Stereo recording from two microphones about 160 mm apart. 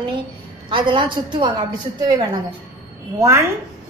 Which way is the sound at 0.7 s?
30° right (ahead or behind).